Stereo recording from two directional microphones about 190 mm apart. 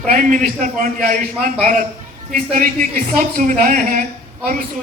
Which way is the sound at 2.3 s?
45° right (ahead or behind).